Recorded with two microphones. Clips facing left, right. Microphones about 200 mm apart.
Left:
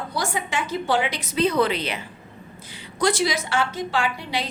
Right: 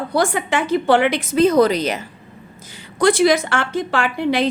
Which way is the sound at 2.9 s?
55° right (ahead or behind).